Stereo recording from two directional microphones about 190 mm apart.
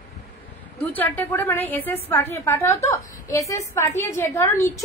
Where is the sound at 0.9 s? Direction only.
10° left (ahead or behind).